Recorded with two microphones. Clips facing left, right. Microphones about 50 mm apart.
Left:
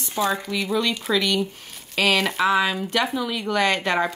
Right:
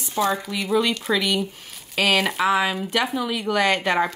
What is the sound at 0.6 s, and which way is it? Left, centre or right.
A woman's voice, centre.